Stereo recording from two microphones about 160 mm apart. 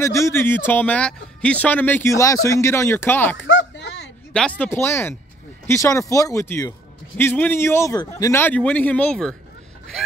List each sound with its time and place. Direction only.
0.0 s a man's voice: 15° left (ahead or behind)
3.7 s a sound: 90° left
4.3 s a man's voice: 5° left (ahead or behind)